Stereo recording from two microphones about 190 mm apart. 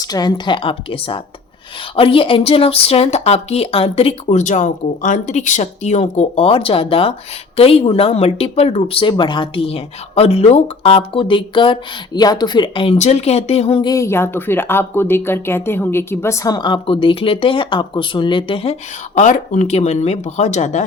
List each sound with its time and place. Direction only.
0.0 s a woman's voice: 20° left (ahead or behind); by 20.8 s 35° left (ahead or behind)